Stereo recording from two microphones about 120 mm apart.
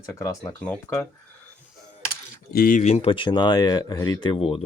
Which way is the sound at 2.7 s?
65° left (ahead or behind).